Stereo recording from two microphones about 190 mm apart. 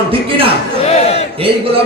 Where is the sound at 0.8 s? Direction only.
35° left (ahead or behind).